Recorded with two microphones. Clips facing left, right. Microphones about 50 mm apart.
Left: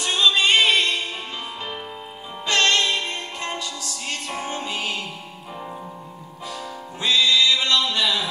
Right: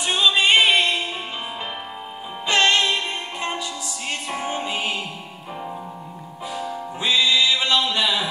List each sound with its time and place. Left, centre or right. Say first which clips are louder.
0.0 s music: right 1 dB; centre
2.4 s music: right 1 dB; centre
6.5 s music: right 6 dB; centre